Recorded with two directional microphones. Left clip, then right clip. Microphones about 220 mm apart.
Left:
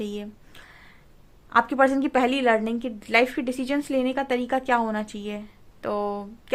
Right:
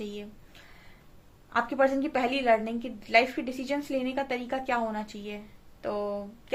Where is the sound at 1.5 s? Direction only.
50° left (ahead or behind).